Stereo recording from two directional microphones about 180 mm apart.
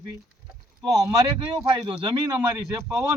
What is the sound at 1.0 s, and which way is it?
Speech, 25° right (ahead or behind).